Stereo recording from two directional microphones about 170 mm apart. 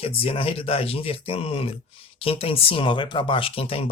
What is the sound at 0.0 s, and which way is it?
Speech, 35° left (ahead or behind).